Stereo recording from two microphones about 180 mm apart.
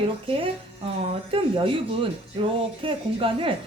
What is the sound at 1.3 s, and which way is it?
A woman's voice, 30° right (ahead or behind).